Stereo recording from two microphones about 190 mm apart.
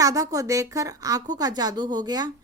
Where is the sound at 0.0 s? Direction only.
20° right (ahead or behind).